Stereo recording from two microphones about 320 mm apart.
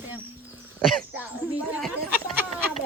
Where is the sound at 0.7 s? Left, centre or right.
Centre.